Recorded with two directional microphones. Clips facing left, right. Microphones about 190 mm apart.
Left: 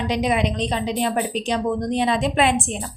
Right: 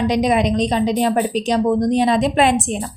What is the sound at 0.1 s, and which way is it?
A woman's voice, 40° right (ahead or behind).